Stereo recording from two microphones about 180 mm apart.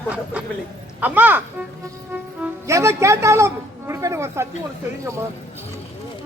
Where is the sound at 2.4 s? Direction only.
15° right (ahead or behind).